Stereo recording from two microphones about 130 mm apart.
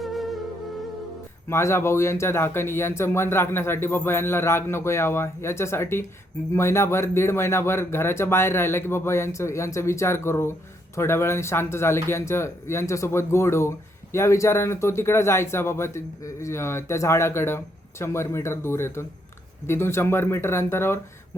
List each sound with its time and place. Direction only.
0.0 s music: centre (ahead or behind)
1.5 s speech: 20° left (ahead or behind)